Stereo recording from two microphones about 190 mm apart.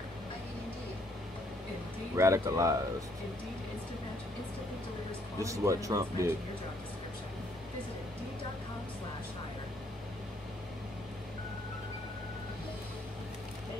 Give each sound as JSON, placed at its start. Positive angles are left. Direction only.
{"t": 2.1, "sound": "speech", "side_deg": -15}
{"t": 5.4, "sound": "speech", "side_deg": -15}